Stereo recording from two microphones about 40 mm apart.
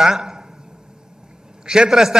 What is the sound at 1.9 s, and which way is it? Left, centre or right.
Speech, centre.